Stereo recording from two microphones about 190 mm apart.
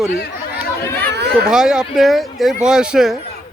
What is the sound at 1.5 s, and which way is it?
Speech, 5° right (ahead or behind).